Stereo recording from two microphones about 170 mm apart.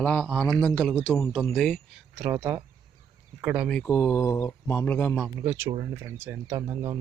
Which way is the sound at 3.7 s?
10° left (ahead or behind).